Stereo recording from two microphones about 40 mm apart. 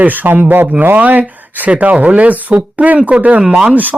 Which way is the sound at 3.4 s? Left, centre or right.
Centre.